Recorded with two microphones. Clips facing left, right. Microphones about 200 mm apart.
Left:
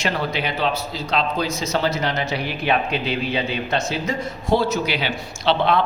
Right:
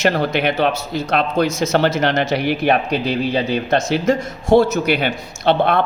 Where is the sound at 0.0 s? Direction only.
55° right (ahead or behind).